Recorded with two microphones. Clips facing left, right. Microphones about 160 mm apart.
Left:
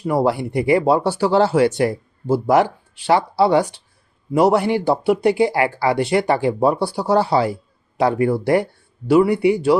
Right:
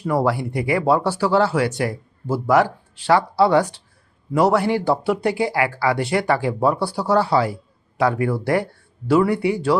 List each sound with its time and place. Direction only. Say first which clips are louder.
0.1 s speech: left 2 dB; 20° left (ahead or behind)